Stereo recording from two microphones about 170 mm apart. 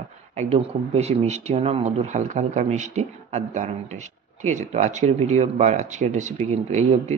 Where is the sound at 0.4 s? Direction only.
40° right (ahead or behind).